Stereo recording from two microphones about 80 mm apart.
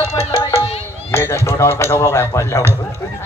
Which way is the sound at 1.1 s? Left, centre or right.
Left.